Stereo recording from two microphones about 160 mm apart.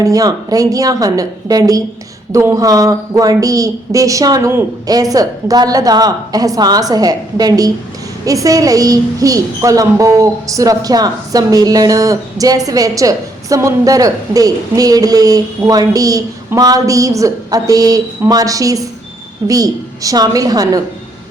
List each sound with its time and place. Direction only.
0.0 s a woman's voice: 20° right (ahead or behind)